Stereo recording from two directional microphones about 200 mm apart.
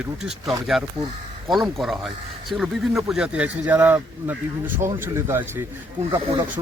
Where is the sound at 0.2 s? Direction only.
Centre (ahead or behind).